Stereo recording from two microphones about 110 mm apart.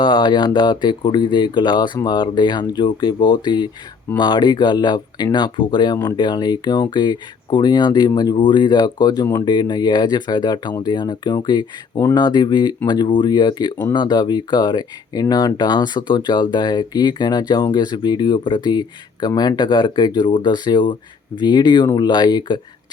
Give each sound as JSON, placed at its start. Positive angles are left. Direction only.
{"t": 0.0, "sound": "speech", "side_deg": 45}